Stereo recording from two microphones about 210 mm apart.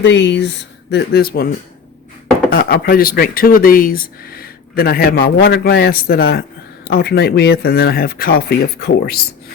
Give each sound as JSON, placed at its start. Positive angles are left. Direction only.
{"t": 0.0, "sound": "speech", "side_deg": 60}